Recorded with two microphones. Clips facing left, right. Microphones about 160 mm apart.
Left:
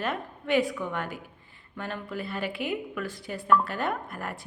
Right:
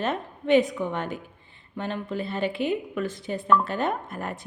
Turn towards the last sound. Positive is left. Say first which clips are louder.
# right 3 dB
turn(degrees=-20)  # may be behind; listen again after turning